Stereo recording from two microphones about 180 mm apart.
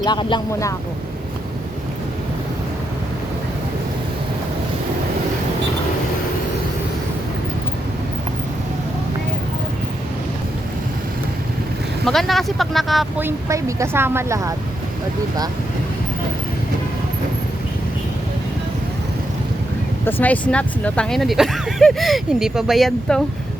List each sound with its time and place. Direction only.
0.0 s speech: 25° left (ahead or behind)
12.0 s speech: centre (ahead or behind)
13.1 s a woman's voice: 15° right (ahead or behind)
20.1 s speech: 10° left (ahead or behind)